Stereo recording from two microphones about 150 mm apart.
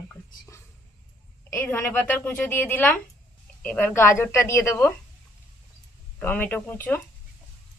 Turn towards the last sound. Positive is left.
turn(degrees=15)  # may be behind; listen again after turning